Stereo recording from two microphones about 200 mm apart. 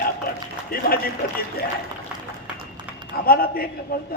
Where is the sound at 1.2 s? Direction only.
50° left (ahead or behind).